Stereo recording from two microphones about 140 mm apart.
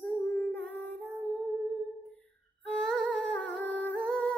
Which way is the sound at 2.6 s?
5° left (ahead or behind).